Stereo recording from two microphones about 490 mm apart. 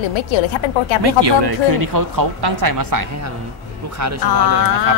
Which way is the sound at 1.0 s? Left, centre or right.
Right.